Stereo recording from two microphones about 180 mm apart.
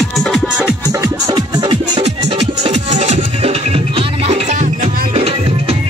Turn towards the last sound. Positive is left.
turn(degrees=-35)  # may be behind; listen again after turning